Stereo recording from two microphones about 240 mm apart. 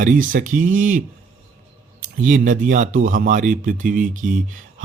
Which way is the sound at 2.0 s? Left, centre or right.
Right.